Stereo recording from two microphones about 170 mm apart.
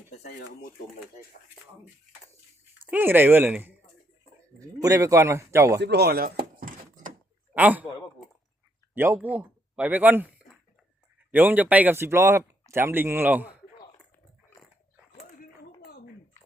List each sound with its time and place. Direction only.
0.2 s speech: 70° left (ahead or behind)
2.9 s speech: 10° right (ahead or behind)
4.8 s speech: 20° right (ahead or behind)
5.8 s speech: 75° right (ahead or behind); by 6.7 s 55° right (ahead or behind)
7.5 s a man's voice: 10° right (ahead or behind)
9.0 s speech: 15° right (ahead or behind)
15.8 s gargling: 70° left (ahead or behind)